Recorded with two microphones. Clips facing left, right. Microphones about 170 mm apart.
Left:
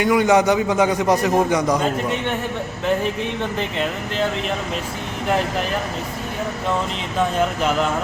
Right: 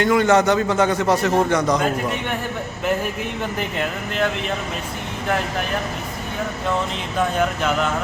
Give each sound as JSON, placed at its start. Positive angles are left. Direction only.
{"t": 0.0, "sound": "a man's voice", "side_deg": 10}
{"t": 3.6, "sound": "speech", "side_deg": 20}